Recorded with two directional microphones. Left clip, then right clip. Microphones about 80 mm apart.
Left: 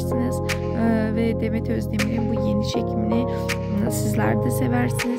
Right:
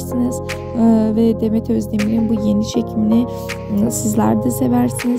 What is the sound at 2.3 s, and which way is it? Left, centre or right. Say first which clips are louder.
Speech: right 4 dB; right.